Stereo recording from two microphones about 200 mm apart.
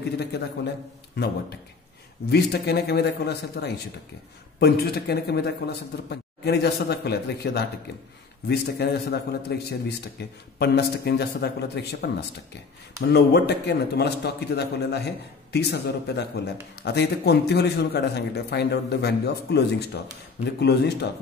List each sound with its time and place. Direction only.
1.2 s speech: 55° left (ahead or behind)
2.3 s speech: 55° left (ahead or behind)